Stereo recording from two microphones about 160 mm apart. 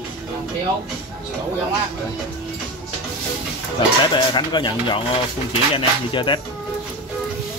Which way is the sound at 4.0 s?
30° left (ahead or behind).